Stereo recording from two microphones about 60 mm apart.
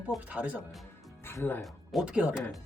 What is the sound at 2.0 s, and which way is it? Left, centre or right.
Speech, centre.